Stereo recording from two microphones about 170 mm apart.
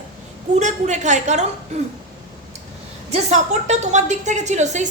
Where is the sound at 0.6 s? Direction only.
45° right (ahead or behind).